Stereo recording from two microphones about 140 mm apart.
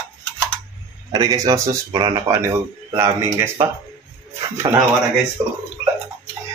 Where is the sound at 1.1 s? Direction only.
25° right (ahead or behind).